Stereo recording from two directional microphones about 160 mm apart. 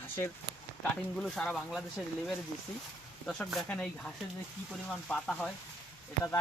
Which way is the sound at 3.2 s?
Centre (ahead or behind).